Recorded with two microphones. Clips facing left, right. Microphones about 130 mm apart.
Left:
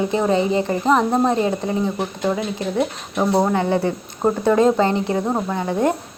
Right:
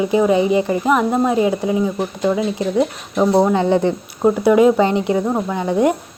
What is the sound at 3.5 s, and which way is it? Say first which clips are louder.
Speech: right 4 dB; 20° right (ahead or behind).